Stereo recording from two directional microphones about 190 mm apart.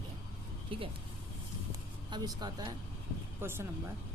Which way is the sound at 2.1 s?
20° right (ahead or behind).